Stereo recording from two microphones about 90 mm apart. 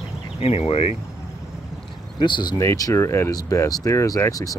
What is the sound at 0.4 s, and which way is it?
Speech, 90° left.